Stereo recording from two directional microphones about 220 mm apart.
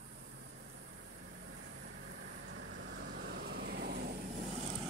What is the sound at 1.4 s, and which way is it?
Vehicle, 55° right (ahead or behind).